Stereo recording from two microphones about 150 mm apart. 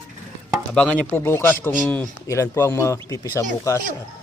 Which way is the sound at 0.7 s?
5° left (ahead or behind).